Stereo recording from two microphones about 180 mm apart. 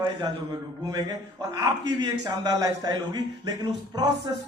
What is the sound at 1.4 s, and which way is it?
A man's voice, 20° right (ahead or behind).